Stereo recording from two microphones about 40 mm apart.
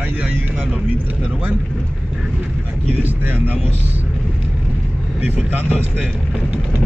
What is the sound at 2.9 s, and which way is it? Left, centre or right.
Speech, right.